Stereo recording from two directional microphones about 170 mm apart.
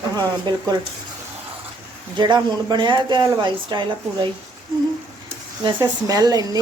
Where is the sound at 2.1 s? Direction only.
25° right (ahead or behind).